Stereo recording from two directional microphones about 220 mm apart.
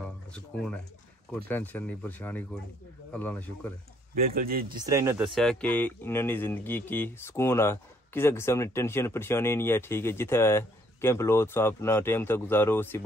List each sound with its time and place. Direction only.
0.0 s a sound: 5° left (ahead or behind)
1.5 s speech: 10° left (ahead or behind)
4.4 s speech: 40° right (ahead or behind)
4.7 s speech: 15° right (ahead or behind); by 13.0 s 10° left (ahead or behind)